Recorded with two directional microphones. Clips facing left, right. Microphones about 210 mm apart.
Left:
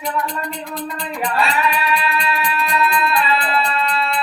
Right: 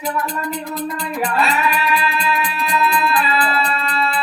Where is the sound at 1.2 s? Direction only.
Centre (ahead or behind).